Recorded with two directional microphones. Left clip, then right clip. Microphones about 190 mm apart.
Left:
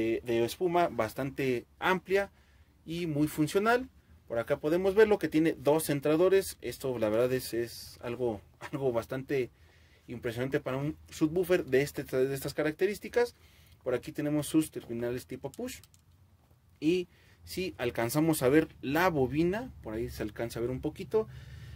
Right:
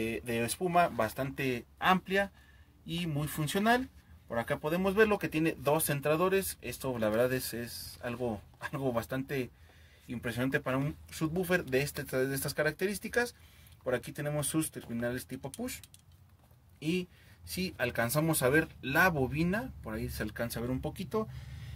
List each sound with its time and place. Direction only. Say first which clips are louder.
0.0 s speech: left 4 dB; 40° left (ahead or behind)
17.6 s speech: even; 50° left (ahead or behind)